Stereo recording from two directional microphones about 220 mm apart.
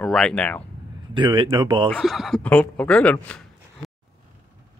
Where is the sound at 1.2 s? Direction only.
20° right (ahead or behind).